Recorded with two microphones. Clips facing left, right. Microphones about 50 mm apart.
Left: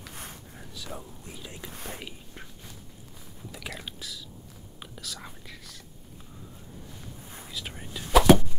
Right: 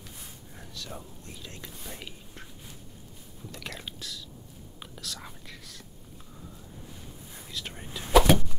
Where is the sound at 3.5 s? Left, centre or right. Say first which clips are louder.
Left 1 dB; centre.